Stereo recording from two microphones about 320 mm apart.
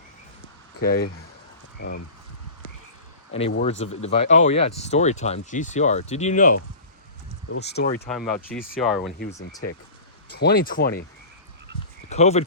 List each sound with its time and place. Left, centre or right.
0.8 s speech: left
3.6 s speech: left
7.9 s speech: centre
9.1 s speech: left
12.0 s speech: centre